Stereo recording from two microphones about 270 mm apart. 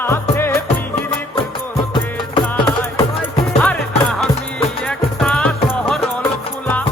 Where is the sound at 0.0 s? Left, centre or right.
Centre.